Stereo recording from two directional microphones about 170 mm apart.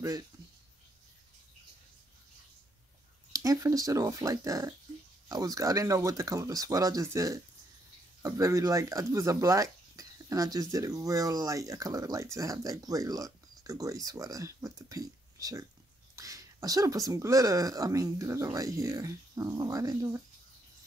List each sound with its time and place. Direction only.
3.3 s speech: 20° right (ahead or behind)